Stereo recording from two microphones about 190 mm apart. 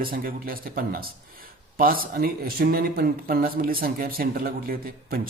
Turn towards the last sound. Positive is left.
turn(degrees=-50)  # may be behind; listen again after turning